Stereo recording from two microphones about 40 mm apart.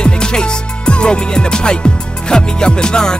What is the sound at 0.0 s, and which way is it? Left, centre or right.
Music, left.